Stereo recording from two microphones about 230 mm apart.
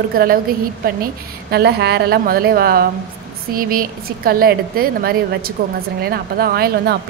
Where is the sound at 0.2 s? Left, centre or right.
Right.